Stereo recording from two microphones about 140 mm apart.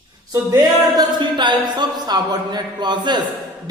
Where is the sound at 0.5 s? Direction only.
30° right (ahead or behind).